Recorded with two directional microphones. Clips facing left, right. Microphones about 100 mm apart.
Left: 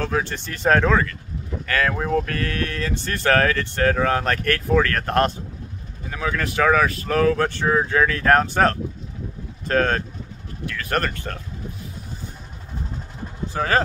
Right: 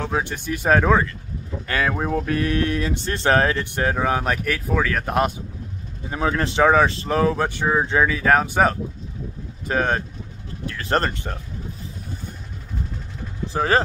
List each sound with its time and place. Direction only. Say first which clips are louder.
0.0 s speech: left 1 dB; 15° right (ahead or behind)
6.0 s speech: right 3 dB; 30° right (ahead or behind)
8.1 s speech: left 1 dB; 5° right (ahead or behind)
10.6 s speech: right 2 dB; 30° right (ahead or behind)
13.5 s speech: right 1 dB; 25° right (ahead or behind)